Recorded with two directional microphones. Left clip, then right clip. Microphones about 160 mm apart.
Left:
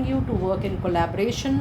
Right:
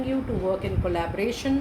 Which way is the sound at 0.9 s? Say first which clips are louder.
Left 6 dB; 50° left (ahead or behind).